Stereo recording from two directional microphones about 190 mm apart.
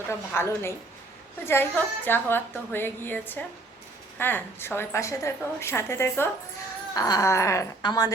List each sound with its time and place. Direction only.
0.1 s a woman's voice: 15° left (ahead or behind)